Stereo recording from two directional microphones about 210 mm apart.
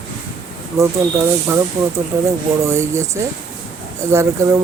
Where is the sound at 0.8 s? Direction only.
15° right (ahead or behind).